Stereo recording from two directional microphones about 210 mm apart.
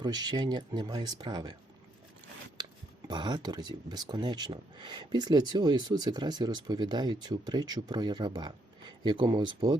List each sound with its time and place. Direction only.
0.0 s speech: 20° right (ahead or behind)
2.6 s a sound: 20° right (ahead or behind)
3.1 s speech: 20° right (ahead or behind)